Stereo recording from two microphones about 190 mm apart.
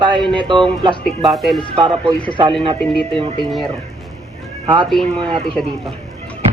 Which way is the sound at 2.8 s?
5° left (ahead or behind).